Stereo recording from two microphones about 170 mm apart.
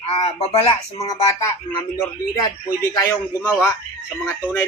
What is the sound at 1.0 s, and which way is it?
A man's voice, 20° left (ahead or behind).